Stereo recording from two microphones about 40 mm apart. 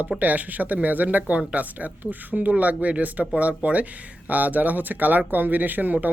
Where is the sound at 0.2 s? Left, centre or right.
Right.